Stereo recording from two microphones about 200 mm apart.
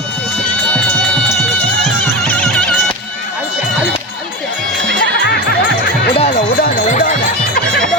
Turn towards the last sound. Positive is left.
turn(degrees=40)  # may be behind; listen again after turning